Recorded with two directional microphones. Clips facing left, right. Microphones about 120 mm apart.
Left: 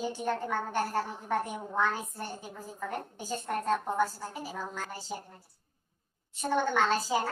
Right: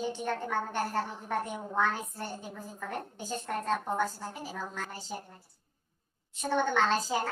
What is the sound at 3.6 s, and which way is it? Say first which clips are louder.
A woman's voice: left 2 dB; 5° left (ahead or behind).